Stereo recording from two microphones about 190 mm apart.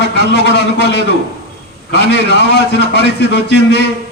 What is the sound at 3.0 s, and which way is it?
Speech, 65° left (ahead or behind).